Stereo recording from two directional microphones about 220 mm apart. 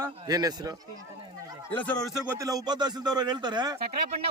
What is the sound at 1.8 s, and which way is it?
A man's voice, 5° left (ahead or behind).